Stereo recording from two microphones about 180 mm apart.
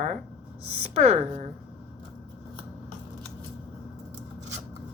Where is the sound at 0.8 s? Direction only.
35° right (ahead or behind).